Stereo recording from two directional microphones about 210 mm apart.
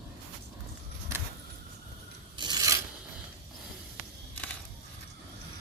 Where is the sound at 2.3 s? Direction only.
20° right (ahead or behind).